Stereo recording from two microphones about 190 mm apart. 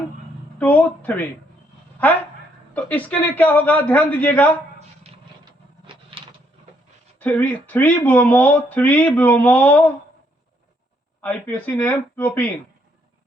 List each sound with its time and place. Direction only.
0.6 s speech: 10° left (ahead or behind)
2.7 s speech: 10° left (ahead or behind)
5.8 s a sound: 30° right (ahead or behind)
7.2 s speech: 10° left (ahead or behind)
11.2 s speech: 10° left (ahead or behind)